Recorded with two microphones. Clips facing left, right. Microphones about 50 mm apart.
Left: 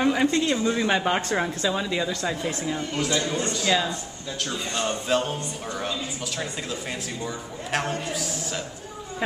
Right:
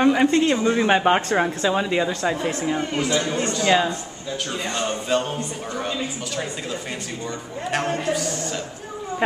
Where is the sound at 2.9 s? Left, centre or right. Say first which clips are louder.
Right 3 dB; centre.